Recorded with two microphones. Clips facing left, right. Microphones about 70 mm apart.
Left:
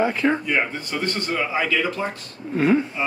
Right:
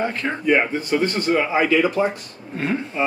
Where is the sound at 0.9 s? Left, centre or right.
Centre.